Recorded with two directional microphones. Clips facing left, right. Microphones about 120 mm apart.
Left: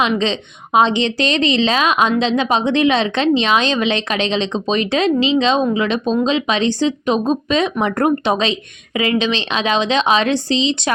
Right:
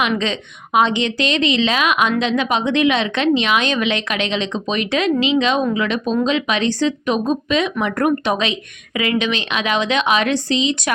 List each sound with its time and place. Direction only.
0.0 s a woman's voice: 25° left (ahead or behind)